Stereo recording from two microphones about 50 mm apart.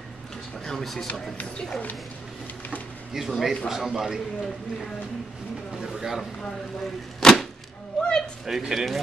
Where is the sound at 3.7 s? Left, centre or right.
Centre.